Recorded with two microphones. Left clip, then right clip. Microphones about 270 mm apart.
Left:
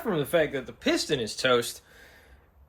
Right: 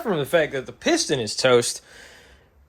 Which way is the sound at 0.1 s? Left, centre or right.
Right.